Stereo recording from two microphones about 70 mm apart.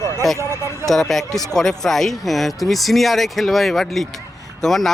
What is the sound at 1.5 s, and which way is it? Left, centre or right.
Speech, centre.